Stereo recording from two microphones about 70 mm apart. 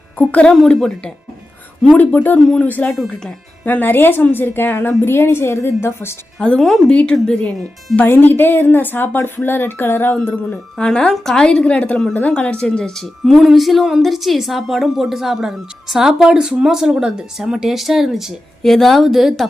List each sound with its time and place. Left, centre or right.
0.8 s a woman's voice: centre
2.0 s speech: left
6.6 s a woman's voice: centre
7.9 s speech: left
10.5 s a woman's voice: centre